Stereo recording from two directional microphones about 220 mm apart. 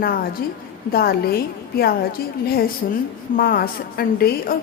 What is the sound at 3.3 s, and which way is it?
A woman's voice, 40° left (ahead or behind).